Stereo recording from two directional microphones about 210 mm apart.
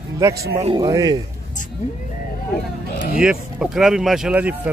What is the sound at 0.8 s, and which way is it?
Speech, 15° right (ahead or behind).